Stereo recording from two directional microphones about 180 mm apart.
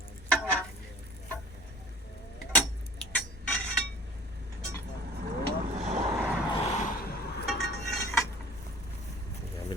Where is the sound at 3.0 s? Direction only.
10° left (ahead or behind).